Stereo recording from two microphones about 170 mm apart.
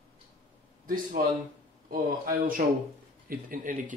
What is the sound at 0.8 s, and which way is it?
Speech, 55° right (ahead or behind).